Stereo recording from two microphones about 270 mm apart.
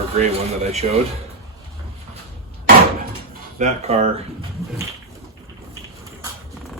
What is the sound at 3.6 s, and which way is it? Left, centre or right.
Speech, right.